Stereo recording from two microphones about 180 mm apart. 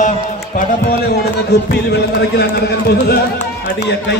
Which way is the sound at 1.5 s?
65° left (ahead or behind).